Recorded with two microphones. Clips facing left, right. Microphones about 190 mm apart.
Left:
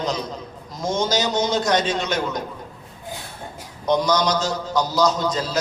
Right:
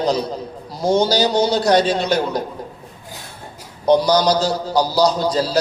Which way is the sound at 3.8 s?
35° right (ahead or behind).